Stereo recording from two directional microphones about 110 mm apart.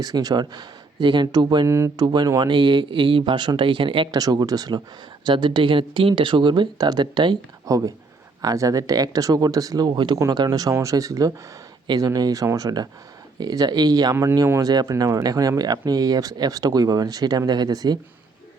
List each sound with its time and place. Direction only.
0.0 s speech: 35° right (ahead or behind)
1.6 s speech: 25° right (ahead or behind)
2.0 s speech: 40° right (ahead or behind)
4.2 s speech: 35° right (ahead or behind)
10.2 s speech: 30° right (ahead or behind)
14.7 s speech: 35° right (ahead or behind)